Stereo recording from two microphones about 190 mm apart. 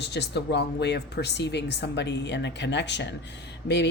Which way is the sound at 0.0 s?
60° left (ahead or behind).